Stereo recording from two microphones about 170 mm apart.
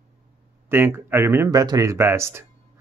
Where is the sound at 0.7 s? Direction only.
15° right (ahead or behind).